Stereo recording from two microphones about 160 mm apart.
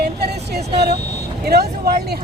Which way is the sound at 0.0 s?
90° right.